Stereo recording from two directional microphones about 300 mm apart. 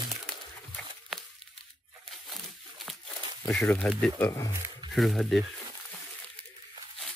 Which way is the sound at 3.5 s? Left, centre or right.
Centre.